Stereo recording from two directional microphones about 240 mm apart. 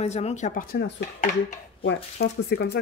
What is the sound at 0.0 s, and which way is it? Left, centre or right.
Speech, left.